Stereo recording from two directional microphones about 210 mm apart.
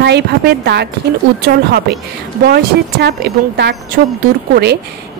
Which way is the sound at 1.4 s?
50° right (ahead or behind).